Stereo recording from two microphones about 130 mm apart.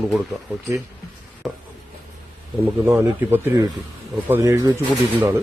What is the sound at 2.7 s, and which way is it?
A man's voice, 15° right (ahead or behind).